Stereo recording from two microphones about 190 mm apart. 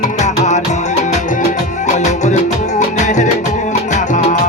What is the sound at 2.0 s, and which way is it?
Music, 40° left (ahead or behind).